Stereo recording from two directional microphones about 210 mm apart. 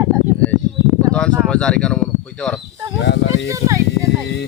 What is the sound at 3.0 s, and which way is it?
Speech, 55° left (ahead or behind).